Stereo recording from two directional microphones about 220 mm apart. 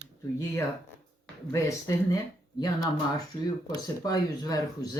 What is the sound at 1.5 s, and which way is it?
Speech, 15° left (ahead or behind).